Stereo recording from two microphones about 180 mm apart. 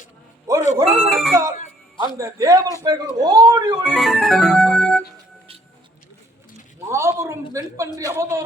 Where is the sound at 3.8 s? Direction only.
Centre (ahead or behind).